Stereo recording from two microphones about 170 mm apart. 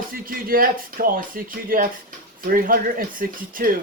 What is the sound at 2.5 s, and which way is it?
Speech, 55° right (ahead or behind).